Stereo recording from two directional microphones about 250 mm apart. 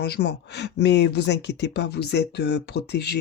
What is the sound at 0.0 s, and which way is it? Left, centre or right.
Speech, left.